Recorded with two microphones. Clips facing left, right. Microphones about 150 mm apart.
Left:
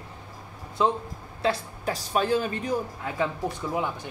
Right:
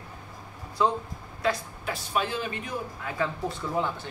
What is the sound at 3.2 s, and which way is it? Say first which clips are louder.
Speech: left 2 dB; 15° left (ahead or behind).